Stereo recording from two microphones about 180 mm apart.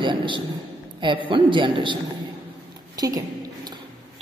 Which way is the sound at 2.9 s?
20° right (ahead or behind).